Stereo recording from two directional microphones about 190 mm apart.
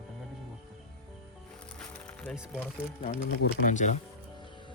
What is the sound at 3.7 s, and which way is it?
Speech, 40° left (ahead or behind).